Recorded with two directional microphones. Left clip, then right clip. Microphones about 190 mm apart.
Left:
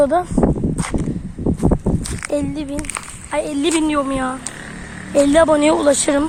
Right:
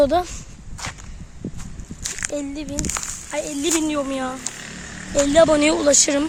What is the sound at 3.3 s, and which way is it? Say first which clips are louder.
Speech: left 5 dB; 35° left (ahead or behind).